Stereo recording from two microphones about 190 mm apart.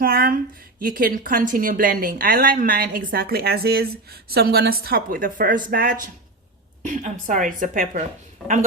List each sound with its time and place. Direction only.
0.0 s speech: 50° right (ahead or behind)